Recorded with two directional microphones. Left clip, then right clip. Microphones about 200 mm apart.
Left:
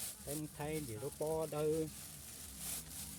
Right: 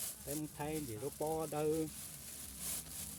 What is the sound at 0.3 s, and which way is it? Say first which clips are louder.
Speech: right 1 dB; 20° right (ahead or behind).